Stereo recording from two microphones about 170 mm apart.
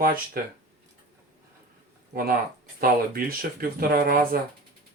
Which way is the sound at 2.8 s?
60° right (ahead or behind).